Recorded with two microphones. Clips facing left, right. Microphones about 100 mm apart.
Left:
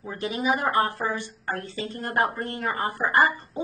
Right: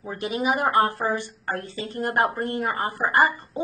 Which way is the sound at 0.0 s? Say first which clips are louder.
Right 2 dB; 30° right (ahead or behind).